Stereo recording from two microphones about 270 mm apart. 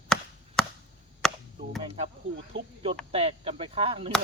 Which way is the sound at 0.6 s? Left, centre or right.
Centre.